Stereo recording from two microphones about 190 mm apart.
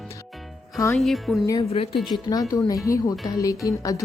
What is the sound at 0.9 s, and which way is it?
Speech, centre (ahead or behind).